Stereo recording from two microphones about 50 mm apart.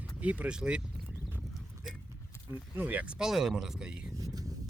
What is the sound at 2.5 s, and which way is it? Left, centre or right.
Speech, right.